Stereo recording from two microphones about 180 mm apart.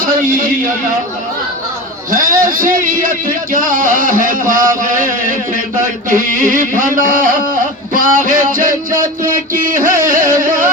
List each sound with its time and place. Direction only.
0.0 s a sound: 50° right (ahead or behind)
2.0 s a man's voice: 50° right (ahead or behind)
9.5 s music: 50° right (ahead or behind)